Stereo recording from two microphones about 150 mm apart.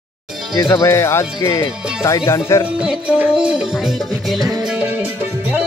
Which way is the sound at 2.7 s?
10° right (ahead or behind).